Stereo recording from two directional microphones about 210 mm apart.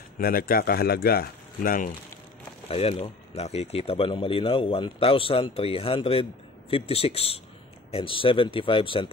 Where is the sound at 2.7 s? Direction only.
30° left (ahead or behind).